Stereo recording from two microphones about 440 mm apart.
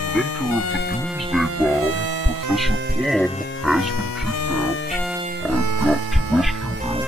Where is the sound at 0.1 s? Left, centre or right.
Left.